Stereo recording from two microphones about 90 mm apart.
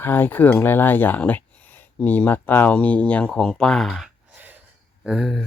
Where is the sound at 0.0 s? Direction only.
20° left (ahead or behind).